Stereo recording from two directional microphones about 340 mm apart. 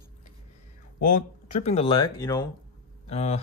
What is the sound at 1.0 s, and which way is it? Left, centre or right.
Speech, left.